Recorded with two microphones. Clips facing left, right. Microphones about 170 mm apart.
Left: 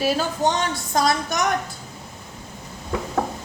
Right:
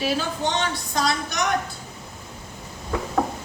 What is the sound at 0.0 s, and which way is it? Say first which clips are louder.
A woman's voice: left 3 dB; 45° left (ahead or behind).